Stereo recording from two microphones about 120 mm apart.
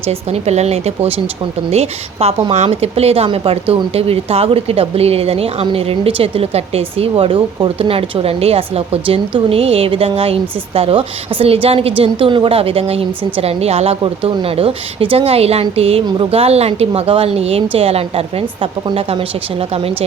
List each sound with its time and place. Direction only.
0.1 s a woman's voice: 65° right (ahead or behind)
18.9 s a woman's voice: 45° right (ahead or behind)
19.7 s a woman's voice: 55° right (ahead or behind)